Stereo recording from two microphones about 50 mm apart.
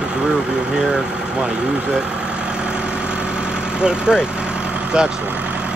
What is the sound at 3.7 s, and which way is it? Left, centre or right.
Speech, centre.